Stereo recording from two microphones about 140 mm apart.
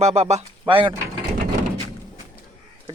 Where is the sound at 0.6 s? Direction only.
35° right (ahead or behind).